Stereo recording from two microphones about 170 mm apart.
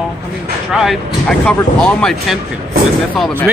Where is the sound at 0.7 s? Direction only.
Centre (ahead or behind).